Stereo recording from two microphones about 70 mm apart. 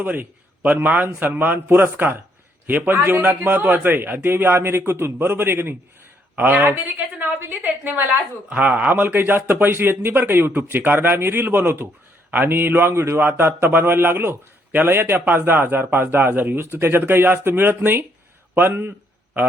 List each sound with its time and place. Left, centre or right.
0.0 s a man's voice: right